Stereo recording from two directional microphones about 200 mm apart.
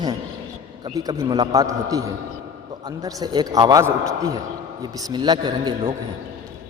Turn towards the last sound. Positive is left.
turn(degrees=-25)  # may be behind; listen again after turning